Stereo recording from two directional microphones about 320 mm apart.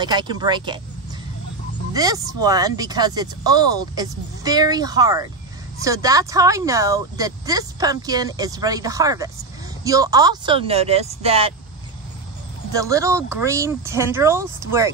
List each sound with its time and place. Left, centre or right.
0.0 s speech: centre
2.0 s speech: centre
12.7 s speech: centre